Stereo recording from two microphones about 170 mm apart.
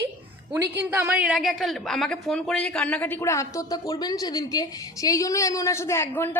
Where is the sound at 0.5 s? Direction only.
15° right (ahead or behind).